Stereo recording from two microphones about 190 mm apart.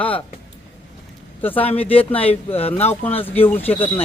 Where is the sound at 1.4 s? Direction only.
10° left (ahead or behind).